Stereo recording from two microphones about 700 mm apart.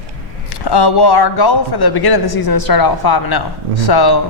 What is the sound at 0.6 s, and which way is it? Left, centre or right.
A woman's voice, left.